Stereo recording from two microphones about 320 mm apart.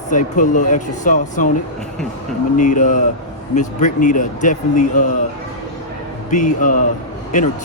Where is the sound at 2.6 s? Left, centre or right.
Left.